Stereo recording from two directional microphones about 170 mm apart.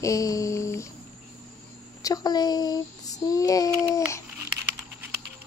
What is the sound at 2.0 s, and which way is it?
A woman's voice, 20° left (ahead or behind).